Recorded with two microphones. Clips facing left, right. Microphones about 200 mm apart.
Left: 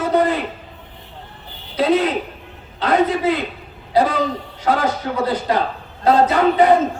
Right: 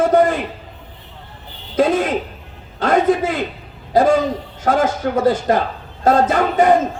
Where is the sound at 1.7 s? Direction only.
45° right (ahead or behind).